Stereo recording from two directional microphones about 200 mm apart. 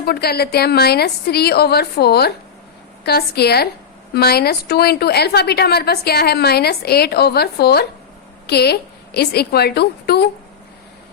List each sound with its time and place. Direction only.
0.0 s a woman's voice: 50° left (ahead or behind)